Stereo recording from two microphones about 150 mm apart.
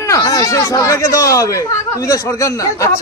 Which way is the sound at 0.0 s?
20° left (ahead or behind).